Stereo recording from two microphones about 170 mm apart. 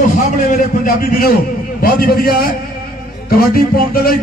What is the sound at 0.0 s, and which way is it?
A man's voice, 45° left (ahead or behind).